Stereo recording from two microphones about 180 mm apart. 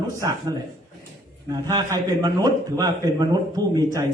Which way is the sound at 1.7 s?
20° right (ahead or behind).